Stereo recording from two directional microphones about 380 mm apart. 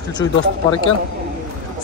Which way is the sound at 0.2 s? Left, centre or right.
Left.